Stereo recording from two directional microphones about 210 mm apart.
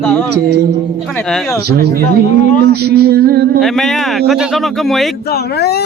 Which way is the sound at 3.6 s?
Centre (ahead or behind).